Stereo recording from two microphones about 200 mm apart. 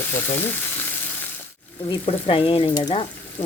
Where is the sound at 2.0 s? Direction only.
25° left (ahead or behind).